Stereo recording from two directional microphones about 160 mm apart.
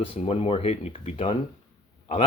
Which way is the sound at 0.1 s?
35° left (ahead or behind).